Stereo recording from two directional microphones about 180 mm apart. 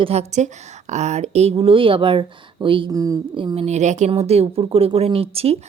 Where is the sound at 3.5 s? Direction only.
40° right (ahead or behind).